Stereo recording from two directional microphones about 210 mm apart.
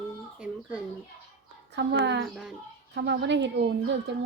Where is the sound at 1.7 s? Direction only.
55° right (ahead or behind).